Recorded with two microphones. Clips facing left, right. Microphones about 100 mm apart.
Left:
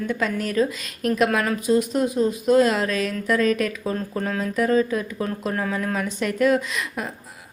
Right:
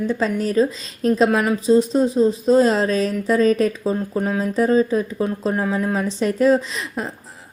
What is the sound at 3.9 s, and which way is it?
Speech, 15° right (ahead or behind).